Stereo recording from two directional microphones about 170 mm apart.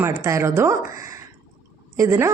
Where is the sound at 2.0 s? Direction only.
15° right (ahead or behind).